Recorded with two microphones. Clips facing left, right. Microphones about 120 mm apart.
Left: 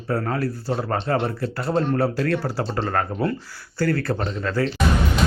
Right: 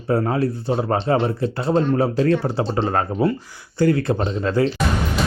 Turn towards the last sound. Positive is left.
turn(degrees=-25)  # may be behind; listen again after turning